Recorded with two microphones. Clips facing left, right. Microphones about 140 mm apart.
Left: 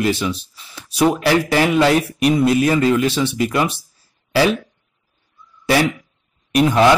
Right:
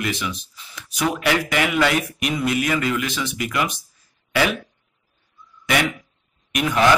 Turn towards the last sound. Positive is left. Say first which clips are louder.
# left 7 dB
turn(degrees=35)  # may be behind; listen again after turning